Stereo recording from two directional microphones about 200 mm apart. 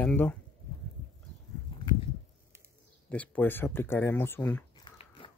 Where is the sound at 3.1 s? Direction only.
5° left (ahead or behind).